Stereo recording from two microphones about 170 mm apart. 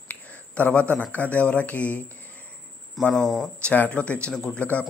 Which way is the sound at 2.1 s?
10° left (ahead or behind).